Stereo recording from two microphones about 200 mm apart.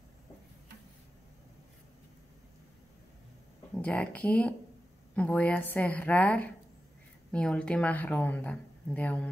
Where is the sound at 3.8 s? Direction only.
5° left (ahead or behind).